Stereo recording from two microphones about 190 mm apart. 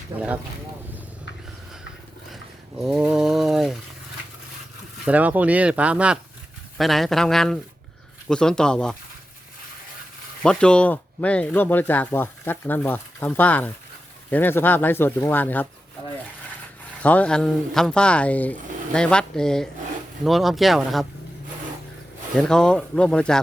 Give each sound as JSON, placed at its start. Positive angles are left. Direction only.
{"t": 0.1, "sound": "speech", "side_deg": -30}
{"t": 2.8, "sound": "a sound", "side_deg": -5}
{"t": 5.0, "sound": "speech", "side_deg": -10}
{"t": 10.4, "sound": "speech", "side_deg": 5}
{"t": 17.0, "sound": "speech", "side_deg": 5}
{"t": 22.4, "sound": "speech", "side_deg": 5}